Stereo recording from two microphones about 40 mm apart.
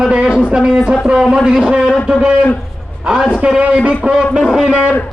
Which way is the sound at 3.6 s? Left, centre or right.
Right.